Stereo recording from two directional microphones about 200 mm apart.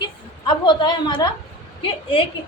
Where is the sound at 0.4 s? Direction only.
20° left (ahead or behind).